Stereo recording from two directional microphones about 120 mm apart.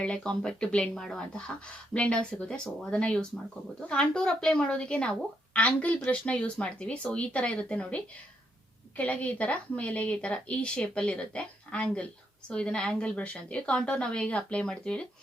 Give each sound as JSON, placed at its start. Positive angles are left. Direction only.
{"t": 0.0, "sound": "speech", "side_deg": 5}